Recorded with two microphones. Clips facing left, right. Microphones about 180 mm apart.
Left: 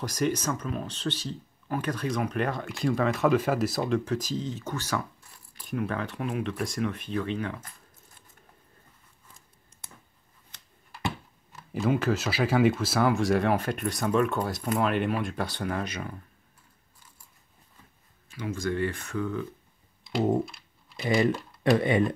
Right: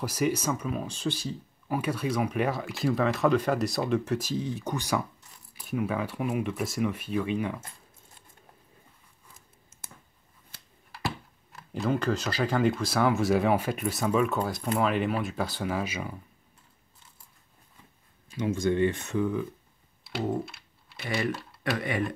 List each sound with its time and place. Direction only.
0.0 s speech: 5° right (ahead or behind)
9.3 s scissors: 5° right (ahead or behind)
11.1 s speech: centre (ahead or behind)
18.3 s speech: 20° right (ahead or behind)
21.0 s speech: 20° left (ahead or behind)